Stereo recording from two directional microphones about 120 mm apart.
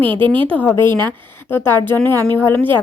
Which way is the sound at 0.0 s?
40° right (ahead or behind).